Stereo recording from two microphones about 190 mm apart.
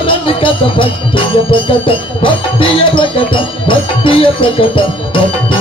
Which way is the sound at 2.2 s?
25° left (ahead or behind).